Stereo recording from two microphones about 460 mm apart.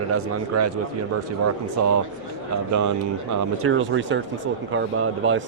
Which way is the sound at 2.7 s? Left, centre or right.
Right.